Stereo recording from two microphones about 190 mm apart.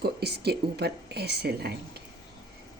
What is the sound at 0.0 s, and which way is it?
Speech, 55° right (ahead or behind).